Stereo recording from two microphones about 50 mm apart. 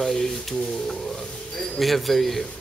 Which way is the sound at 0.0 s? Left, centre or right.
Centre.